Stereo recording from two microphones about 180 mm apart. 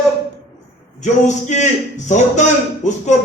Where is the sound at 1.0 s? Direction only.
40° left (ahead or behind).